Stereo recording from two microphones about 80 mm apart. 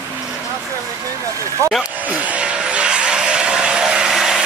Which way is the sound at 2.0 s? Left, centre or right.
Centre.